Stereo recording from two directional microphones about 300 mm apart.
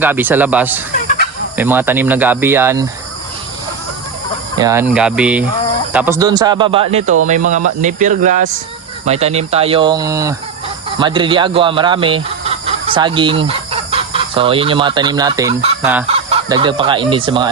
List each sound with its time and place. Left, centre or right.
0.0 s speech: centre
1.0 s fowl: left
1.5 s speech: centre
4.5 s speech: centre
16.0 s fowl: centre